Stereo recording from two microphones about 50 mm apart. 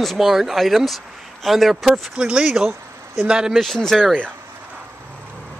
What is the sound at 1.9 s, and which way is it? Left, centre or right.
Speech, centre.